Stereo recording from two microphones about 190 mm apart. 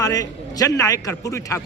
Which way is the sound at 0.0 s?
20° left (ahead or behind).